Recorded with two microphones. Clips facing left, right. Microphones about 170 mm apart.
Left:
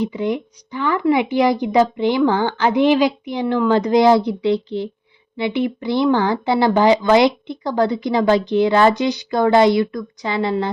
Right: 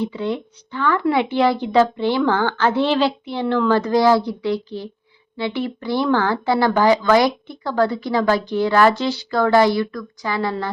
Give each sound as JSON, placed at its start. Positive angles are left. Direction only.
{"t": 0.0, "sound": "a woman's voice", "side_deg": 15}